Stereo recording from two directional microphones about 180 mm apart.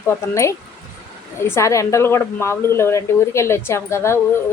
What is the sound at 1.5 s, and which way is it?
A woman's voice, 15° left (ahead or behind).